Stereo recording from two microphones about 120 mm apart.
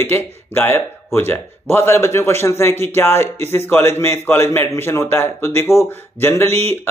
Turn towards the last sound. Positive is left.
turn(degrees=20)  # may be behind; listen again after turning